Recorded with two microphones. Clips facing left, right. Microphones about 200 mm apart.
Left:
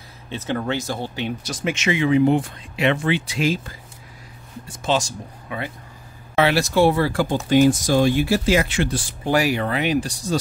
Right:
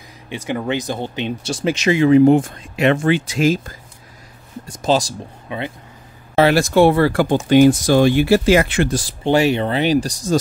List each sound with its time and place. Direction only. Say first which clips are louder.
0.3 s speech: right 2 dB; 10° right (ahead or behind); by 5.1 s 35° right (ahead or behind)
5.5 s speech: right 3 dB; 20° right (ahead or behind)
6.3 s speech: right 5 dB; 45° right (ahead or behind)
9.2 s speech: right 4 dB; 25° right (ahead or behind); by 10.3 s 40° right (ahead or behind)